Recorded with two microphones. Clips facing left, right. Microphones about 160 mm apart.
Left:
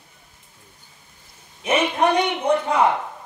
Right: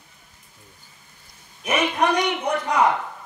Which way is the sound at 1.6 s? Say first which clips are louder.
Left 2 dB; 25° left (ahead or behind).